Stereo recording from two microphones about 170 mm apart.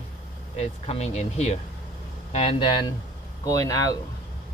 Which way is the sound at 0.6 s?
35° left (ahead or behind).